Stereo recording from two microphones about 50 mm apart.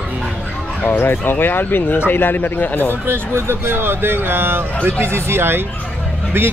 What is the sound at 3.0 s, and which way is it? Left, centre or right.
Speech, right.